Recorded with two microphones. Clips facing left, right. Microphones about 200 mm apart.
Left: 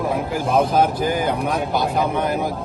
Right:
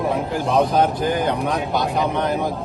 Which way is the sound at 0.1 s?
Centre (ahead or behind).